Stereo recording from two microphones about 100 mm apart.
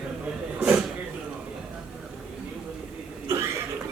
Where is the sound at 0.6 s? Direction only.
15° right (ahead or behind).